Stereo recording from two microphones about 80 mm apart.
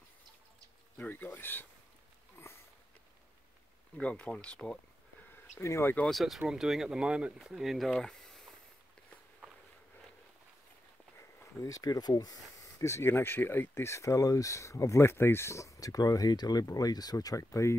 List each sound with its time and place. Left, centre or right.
0.9 s speech: left
4.0 s speech: centre
5.6 s speech: left
6.0 s speech: centre
11.1 s speech: left
12.7 s speech: left